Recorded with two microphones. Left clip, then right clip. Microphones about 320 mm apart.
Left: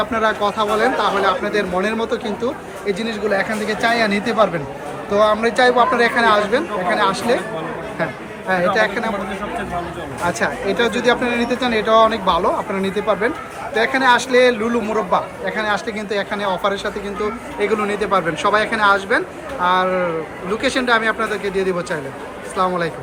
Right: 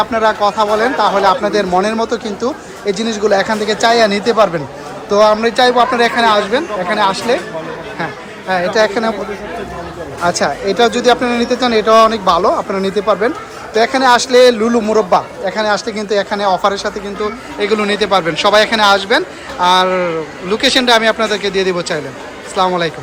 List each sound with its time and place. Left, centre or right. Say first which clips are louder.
0.0 s speech: right 5 dB; centre
8.4 s speech: right 4 dB; centre
10.2 s speech: right 5 dB; centre